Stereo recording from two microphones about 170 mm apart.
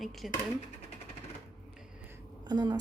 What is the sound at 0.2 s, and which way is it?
Speech, centre (ahead or behind).